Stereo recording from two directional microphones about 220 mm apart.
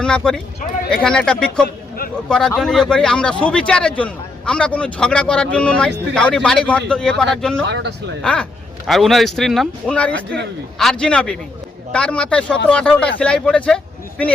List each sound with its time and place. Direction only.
0.0 s speech: 5° left (ahead or behind)
7.7 s a man's voice: 50° right (ahead or behind)
8.2 s speech: 5° left (ahead or behind)